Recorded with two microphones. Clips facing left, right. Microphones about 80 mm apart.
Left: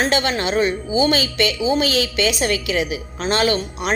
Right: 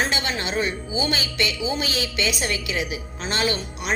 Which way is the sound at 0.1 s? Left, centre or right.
Left.